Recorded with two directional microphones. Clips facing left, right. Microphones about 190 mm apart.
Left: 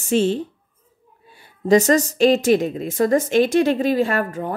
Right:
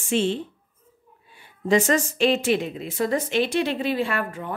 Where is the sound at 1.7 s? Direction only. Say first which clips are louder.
Left 5 dB; 40° left (ahead or behind).